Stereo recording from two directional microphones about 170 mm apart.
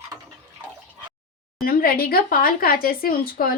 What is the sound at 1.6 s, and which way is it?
Speech, 60° left (ahead or behind).